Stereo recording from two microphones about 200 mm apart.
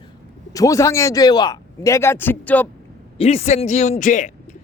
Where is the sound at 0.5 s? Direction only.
15° left (ahead or behind).